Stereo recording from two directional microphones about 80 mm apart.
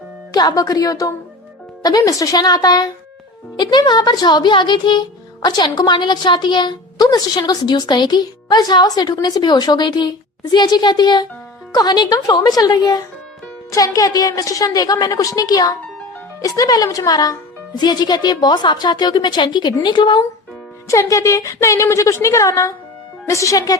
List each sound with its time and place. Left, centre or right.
0.3 s a woman's voice: left
3.6 s a woman's voice: left
5.5 s a woman's voice: left
20.8 s a woman's voice: left